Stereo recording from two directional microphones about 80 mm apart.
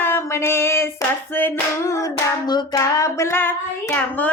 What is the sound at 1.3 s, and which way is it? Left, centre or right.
Speech, left.